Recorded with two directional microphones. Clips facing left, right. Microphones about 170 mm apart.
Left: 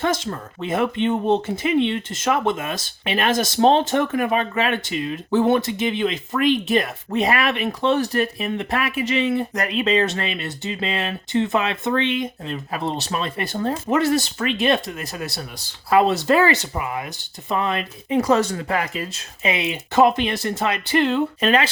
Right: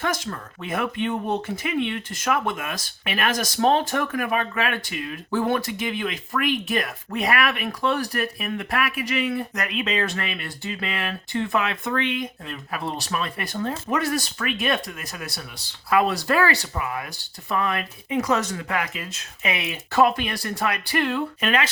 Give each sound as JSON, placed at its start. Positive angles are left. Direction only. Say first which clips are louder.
{"t": 0.0, "sound": "speech", "louder": "left 4 dB", "side_deg": 25}